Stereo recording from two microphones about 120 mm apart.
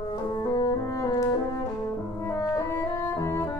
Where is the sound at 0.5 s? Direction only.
35° left (ahead or behind).